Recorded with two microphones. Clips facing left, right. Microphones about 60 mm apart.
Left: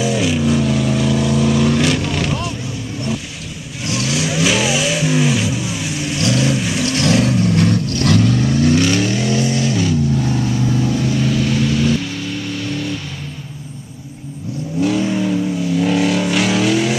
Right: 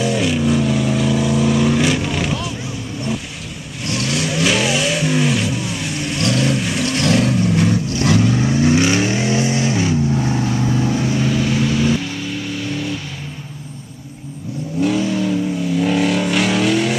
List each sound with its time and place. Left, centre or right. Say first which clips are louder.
0.0 s vehicle: left 1 dB; centre
3.8 s vehicle: left 1 dB; centre
7.8 s vehicle: left 1 dB; centre
11.2 s vehicle: left 1 dB; centre
14.8 s vehicle: left 1 dB; centre
15.0 s vehicle: left 1 dB; centre
15.6 s vehicle: left 1 dB; centre